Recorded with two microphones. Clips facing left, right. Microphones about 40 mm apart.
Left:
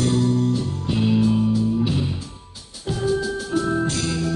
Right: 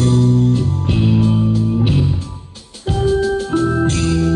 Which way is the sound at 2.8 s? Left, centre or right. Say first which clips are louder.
Right 6 dB; right.